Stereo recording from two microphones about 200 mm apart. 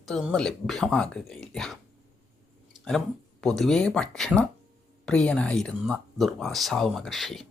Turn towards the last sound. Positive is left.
turn(degrees=0)  # may be behind; listen again after turning